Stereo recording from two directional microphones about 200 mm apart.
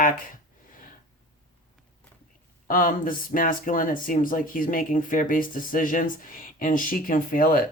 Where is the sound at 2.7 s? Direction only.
45° left (ahead or behind).